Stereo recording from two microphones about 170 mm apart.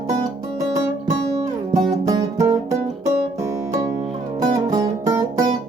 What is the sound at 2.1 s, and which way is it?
Music, 25° right (ahead or behind).